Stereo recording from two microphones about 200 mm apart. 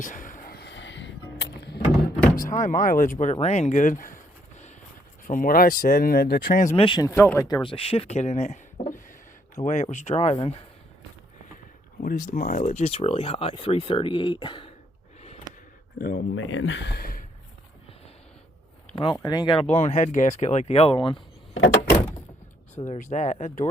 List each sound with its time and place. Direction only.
0.0 s music: 40° left (ahead or behind); by 1.8 s 60° left (ahead or behind)
2.3 s speech: 40° left (ahead or behind)
5.3 s speech: 45° left (ahead or behind)
6.7 s speech: 25° left (ahead or behind)
12.0 s speech: 40° left (ahead or behind); by 14.7 s 25° left (ahead or behind)
16.0 s speech: 50° left (ahead or behind)
16.3 s speech: 80° left; by 17.2 s 45° left (ahead or behind)
19.1 s speech: 20° left (ahead or behind)
22.9 s speech: 35° left (ahead or behind)